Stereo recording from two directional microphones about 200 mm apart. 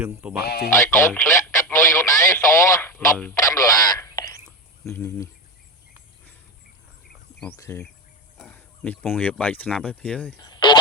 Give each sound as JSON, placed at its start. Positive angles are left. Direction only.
{"t": 0.0, "sound": "speech", "side_deg": -5}
{"t": 0.4, "sound": "speech", "side_deg": 50}
{"t": 0.7, "sound": "speech", "side_deg": 15}
{"t": 7.5, "sound": "speech", "side_deg": 15}
{"t": 10.4, "sound": "a sound", "side_deg": 20}